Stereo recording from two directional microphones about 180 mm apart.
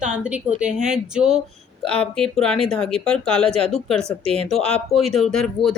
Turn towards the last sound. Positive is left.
turn(degrees=5)  # may be behind; listen again after turning